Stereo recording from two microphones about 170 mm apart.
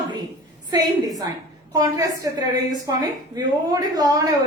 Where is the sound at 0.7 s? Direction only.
20° right (ahead or behind).